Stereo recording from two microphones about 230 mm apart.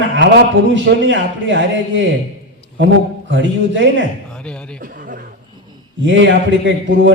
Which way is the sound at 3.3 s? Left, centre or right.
Right.